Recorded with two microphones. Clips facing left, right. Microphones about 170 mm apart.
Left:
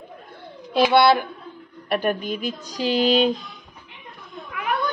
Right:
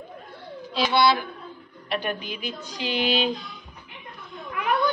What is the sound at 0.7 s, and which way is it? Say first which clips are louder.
A woman's voice: left 5 dB; 55° left (ahead or behind).